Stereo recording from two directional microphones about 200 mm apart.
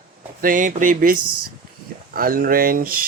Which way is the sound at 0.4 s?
40° right (ahead or behind).